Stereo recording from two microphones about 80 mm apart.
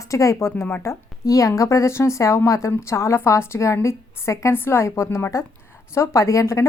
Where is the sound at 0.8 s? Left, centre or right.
Left.